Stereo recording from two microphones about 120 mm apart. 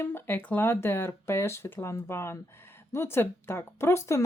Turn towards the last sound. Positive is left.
turn(degrees=25)  # may be behind; listen again after turning